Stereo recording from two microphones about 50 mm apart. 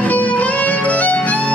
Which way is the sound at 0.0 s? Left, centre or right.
Left.